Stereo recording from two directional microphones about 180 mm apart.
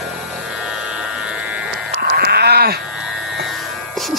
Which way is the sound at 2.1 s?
60° right (ahead or behind).